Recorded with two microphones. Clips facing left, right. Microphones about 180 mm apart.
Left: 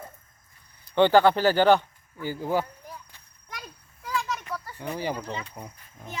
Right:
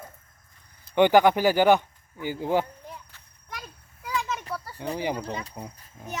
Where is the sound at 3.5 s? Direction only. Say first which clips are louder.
Right 1 dB; 10° right (ahead or behind).